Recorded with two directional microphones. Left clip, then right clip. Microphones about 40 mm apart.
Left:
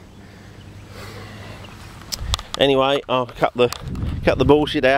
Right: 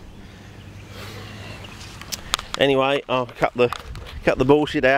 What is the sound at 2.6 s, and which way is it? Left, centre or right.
Speech, left.